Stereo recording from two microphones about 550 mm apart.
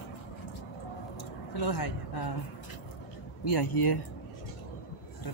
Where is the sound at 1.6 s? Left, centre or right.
Left.